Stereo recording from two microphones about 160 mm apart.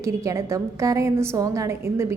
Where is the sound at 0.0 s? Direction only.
20° right (ahead or behind).